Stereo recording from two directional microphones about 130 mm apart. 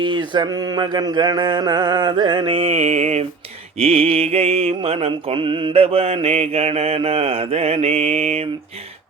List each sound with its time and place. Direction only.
0.0 s mantra: 35° right (ahead or behind); by 8.4 s 50° right (ahead or behind)